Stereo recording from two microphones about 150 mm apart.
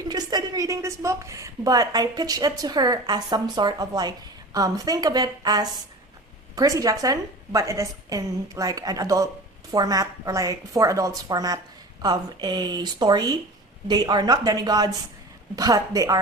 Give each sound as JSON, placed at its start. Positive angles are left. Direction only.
{"t": 0.0, "sound": "a woman's voice", "side_deg": -25}